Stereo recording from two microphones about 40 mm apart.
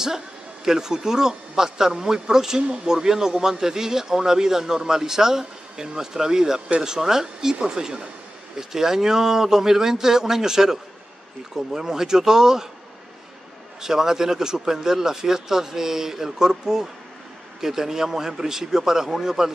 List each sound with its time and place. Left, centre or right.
0.7 s a man's voice: centre
13.7 s a man's voice: centre